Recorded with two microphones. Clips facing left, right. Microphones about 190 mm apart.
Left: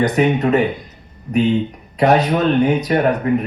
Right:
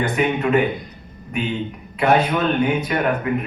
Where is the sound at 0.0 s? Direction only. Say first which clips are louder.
Left 5 dB; 40° left (ahead or behind).